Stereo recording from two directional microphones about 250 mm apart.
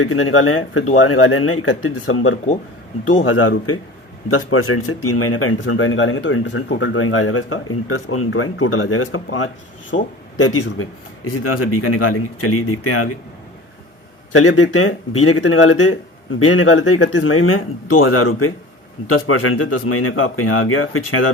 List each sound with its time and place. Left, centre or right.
0.0 s speech: left
14.3 s speech: left